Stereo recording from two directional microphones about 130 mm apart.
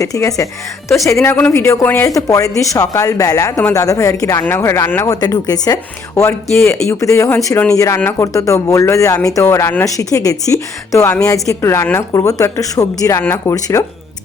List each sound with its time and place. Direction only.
0.0 s speech: 25° left (ahead or behind)
5.0 s speech: 30° left (ahead or behind)